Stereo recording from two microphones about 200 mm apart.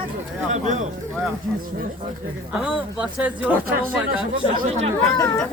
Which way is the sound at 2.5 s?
5° right (ahead or behind).